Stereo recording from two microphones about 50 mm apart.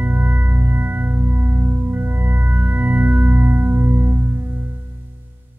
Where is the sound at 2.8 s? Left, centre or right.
Right.